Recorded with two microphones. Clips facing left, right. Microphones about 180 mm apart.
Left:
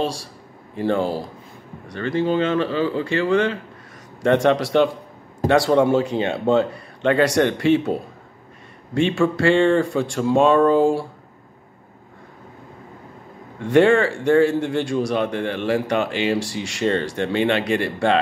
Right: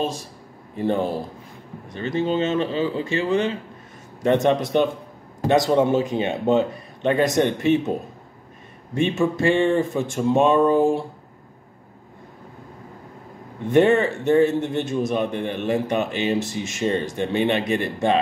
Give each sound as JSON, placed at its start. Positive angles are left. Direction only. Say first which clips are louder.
{"t": 0.0, "sound": "a man's voice", "louder": "left 1 dB", "side_deg": -20}
{"t": 4.6, "sound": "a man's voice", "louder": "left 2 dB", "side_deg": 85}
{"t": 5.5, "sound": "a man's voice", "louder": "left 1 dB", "side_deg": -20}
{"t": 9.1, "sound": "a man's voice", "louder": "left 2 dB", "side_deg": -20}
{"t": 13.8, "sound": "a man's voice", "louder": "left 2 dB", "side_deg": -20}